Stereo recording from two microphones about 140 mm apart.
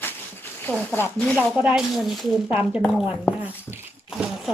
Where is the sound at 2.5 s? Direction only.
10° right (ahead or behind).